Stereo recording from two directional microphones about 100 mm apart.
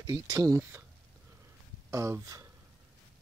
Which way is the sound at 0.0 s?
40° right (ahead or behind).